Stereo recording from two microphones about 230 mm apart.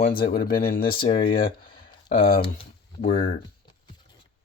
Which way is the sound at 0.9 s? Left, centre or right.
Left.